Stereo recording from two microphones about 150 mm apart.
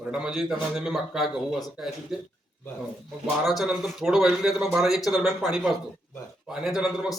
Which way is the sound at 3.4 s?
Centre (ahead or behind).